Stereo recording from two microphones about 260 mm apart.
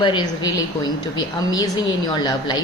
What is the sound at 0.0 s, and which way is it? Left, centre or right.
Speech, centre.